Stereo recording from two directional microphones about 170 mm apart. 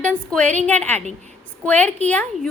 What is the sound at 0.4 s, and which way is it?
Speech, 45° right (ahead or behind).